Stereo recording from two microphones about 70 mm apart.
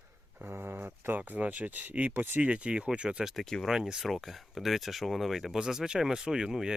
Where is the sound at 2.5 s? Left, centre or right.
Centre.